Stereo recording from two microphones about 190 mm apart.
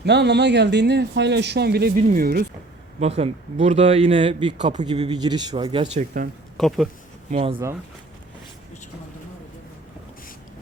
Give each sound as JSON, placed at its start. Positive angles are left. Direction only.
{"t": 0.0, "sound": "speech", "side_deg": -60}
{"t": 2.0, "sound": "speech", "side_deg": -40}
{"t": 2.2, "sound": "speech", "side_deg": -50}
{"t": 3.0, "sound": "speech", "side_deg": -30}
{"t": 6.6, "sound": "speech", "side_deg": 0}
{"t": 7.3, "sound": "speech", "side_deg": -40}